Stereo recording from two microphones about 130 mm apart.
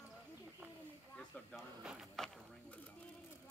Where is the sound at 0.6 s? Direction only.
15° right (ahead or behind).